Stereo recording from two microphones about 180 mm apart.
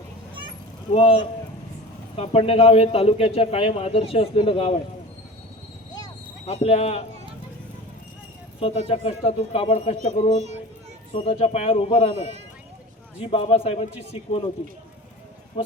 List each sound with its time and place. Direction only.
0.9 s a man's voice: 30° left (ahead or behind)
6.4 s a man's voice: 35° left (ahead or behind)
8.6 s a man's voice: 35° left (ahead or behind)
11.1 s a man's voice: 30° left (ahead or behind)
13.1 s a man's voice: 30° left (ahead or behind)